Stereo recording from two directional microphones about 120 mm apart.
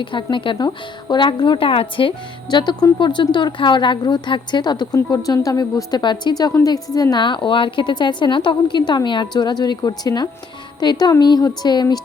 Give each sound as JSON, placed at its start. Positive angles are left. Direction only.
{"t": 0.0, "sound": "speech", "side_deg": 45}